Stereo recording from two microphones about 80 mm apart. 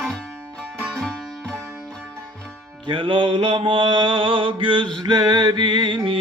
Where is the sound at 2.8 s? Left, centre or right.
Right.